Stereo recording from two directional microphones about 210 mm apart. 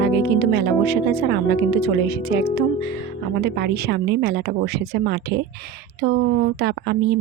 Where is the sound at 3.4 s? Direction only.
50° right (ahead or behind).